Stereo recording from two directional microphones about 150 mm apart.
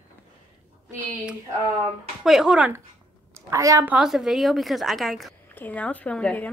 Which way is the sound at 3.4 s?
20° right (ahead or behind).